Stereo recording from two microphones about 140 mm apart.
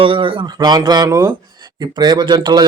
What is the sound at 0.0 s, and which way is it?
Speech, 35° right (ahead or behind).